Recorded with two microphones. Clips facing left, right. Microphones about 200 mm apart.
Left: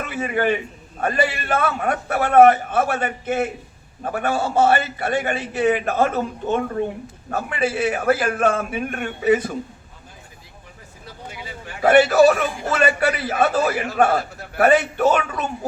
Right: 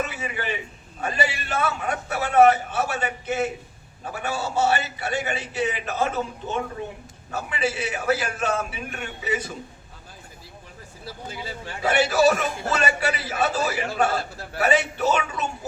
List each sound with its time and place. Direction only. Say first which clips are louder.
0.0 s a man's voice: left 7 dB; 55° left (ahead or behind)
11.8 s a man's voice: left 7 dB; 55° left (ahead or behind)